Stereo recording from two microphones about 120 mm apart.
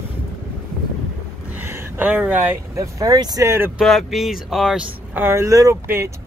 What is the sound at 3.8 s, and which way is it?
Speech, centre (ahead or behind).